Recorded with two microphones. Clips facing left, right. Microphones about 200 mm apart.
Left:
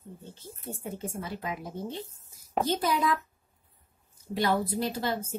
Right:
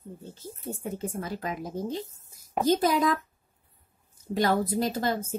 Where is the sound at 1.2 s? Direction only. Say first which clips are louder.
Right 3 dB; 45° right (ahead or behind).